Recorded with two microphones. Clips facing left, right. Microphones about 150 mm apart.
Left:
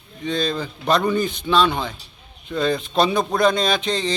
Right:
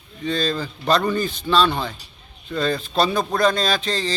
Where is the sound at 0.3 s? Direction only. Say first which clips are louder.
Even; 15° left (ahead or behind).